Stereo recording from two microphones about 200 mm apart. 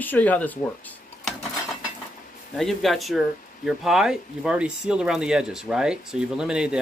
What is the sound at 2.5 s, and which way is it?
Speech, centre (ahead or behind).